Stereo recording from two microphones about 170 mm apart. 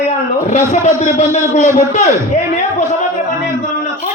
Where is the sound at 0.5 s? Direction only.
45° left (ahead or behind).